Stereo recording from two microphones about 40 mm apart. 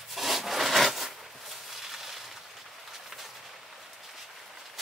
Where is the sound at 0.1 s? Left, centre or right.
Centre.